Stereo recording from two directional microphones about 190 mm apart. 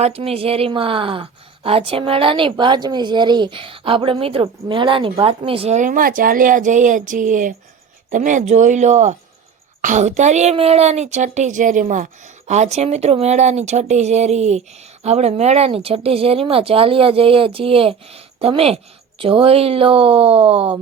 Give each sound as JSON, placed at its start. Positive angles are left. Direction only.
{"t": 0.0, "sound": "a woman's voice", "side_deg": -30}